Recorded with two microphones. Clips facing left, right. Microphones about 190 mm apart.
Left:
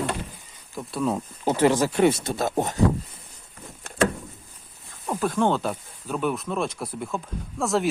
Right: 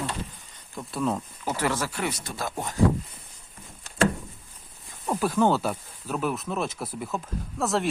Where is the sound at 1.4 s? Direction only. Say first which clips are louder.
Left 8 dB; 20° left (ahead or behind).